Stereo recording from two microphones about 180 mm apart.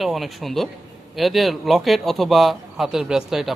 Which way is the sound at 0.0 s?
Centre (ahead or behind).